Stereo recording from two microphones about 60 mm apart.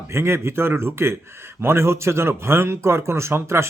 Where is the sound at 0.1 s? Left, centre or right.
Right.